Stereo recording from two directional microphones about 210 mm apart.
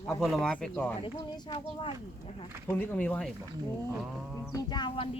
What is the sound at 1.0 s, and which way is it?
Speech, 20° left (ahead or behind).